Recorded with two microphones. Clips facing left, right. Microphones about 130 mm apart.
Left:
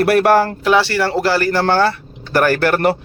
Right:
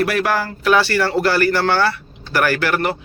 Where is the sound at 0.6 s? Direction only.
20° left (ahead or behind).